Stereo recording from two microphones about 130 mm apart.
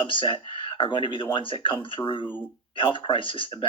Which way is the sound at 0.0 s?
40° left (ahead or behind).